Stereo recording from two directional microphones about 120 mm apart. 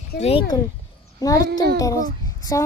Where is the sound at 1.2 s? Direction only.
30° left (ahead or behind).